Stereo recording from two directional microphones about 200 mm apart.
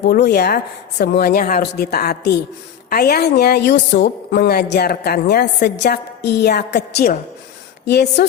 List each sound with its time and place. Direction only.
0.0 s a woman's voice: 55° left (ahead or behind)